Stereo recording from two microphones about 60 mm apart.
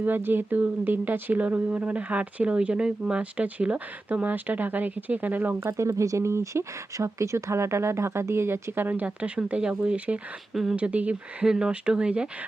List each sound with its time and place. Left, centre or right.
0.0 s speech: right
5.5 s speech: right
10.5 s speech: centre
10.8 s speech: right
11.4 s speech: centre